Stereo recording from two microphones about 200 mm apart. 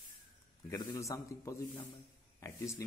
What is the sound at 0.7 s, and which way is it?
A man's voice, 20° left (ahead or behind).